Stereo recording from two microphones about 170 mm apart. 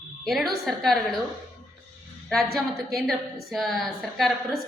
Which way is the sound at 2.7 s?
Centre (ahead or behind).